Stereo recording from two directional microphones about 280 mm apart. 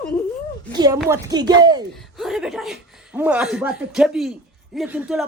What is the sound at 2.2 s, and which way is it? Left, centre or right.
Speech, centre.